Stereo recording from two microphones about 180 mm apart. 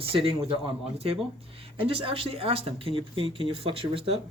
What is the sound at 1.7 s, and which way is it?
Speech, 30° right (ahead or behind).